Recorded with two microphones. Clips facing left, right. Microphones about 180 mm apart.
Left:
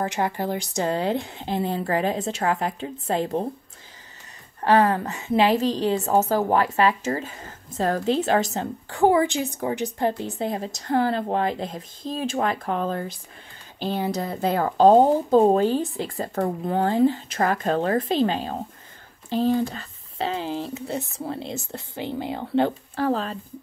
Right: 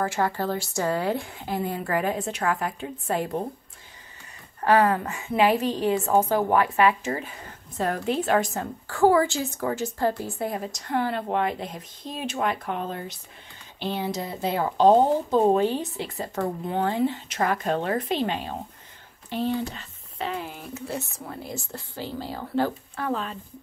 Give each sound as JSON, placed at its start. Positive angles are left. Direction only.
{"t": 0.0, "sound": "a woman's voice", "side_deg": 20}
{"t": 4.6, "sound": "speech", "side_deg": 30}
{"t": 5.9, "sound": "a woman's voice", "side_deg": 20}
{"t": 6.5, "sound": "speech", "side_deg": 40}
{"t": 8.0, "sound": "a woman's voice", "side_deg": 25}
{"t": 10.8, "sound": "speech", "side_deg": 35}
{"t": 14.1, "sound": "a woman's voice", "side_deg": 50}